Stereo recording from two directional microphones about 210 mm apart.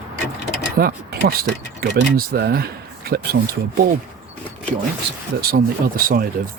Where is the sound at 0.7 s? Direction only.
45° right (ahead or behind).